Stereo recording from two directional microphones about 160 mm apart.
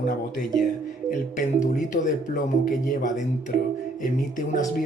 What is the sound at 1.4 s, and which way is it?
A man's voice, 55° left (ahead or behind).